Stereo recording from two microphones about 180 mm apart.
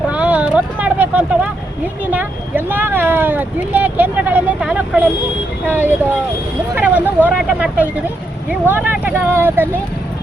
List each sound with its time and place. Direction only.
0.1 s vehicle: 5° right (ahead or behind)
2.0 s speech: 10° right (ahead or behind)
6.7 s vehicle: 10° right (ahead or behind)
7.3 s speech: 10° right (ahead or behind)